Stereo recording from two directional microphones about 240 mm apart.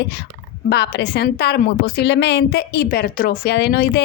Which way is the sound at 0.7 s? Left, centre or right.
Left.